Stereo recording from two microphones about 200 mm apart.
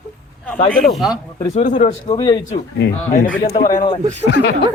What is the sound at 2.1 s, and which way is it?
Speech, 20° left (ahead or behind).